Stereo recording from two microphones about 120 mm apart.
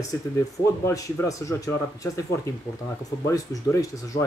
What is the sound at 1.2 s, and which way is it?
Speech, 25° left (ahead or behind).